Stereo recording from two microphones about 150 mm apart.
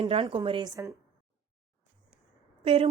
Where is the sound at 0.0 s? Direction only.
40° right (ahead or behind).